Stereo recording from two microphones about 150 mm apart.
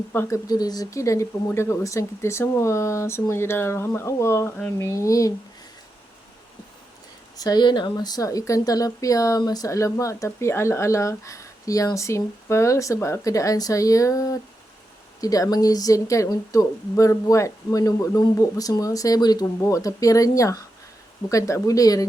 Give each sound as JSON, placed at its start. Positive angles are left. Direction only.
{"t": 0.1, "sound": "speech", "side_deg": 15}
{"t": 0.4, "sound": "speech", "side_deg": 25}
{"t": 7.3, "sound": "speech", "side_deg": 25}